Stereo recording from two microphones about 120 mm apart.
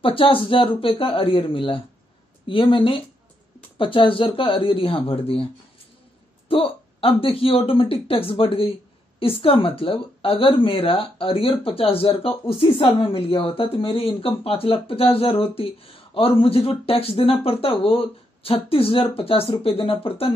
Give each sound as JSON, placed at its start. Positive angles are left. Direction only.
{"t": 0.0, "sound": "speech", "side_deg": 50}
{"t": 6.5, "sound": "speech", "side_deg": 50}